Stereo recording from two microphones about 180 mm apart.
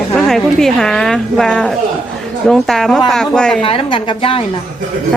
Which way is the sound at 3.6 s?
30° left (ahead or behind).